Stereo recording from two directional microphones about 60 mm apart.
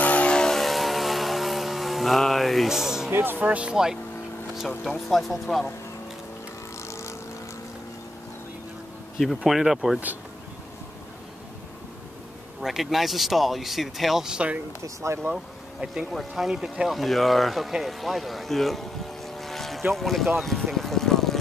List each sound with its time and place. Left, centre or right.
0.0 s vehicle: left; by 3.1 s centre
3.1 s speech: right
3.4 s speech: right
3.7 s speech: centre
6.9 s vehicle: left
9.4 s speech: centre
12.6 s speech: centre